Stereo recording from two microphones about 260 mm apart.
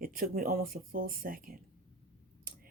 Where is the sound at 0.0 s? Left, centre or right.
Right.